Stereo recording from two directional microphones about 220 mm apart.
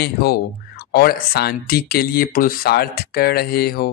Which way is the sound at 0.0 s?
45° left (ahead or behind).